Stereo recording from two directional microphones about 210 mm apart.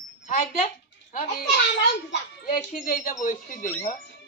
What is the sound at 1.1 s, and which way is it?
Speech, 40° left (ahead or behind).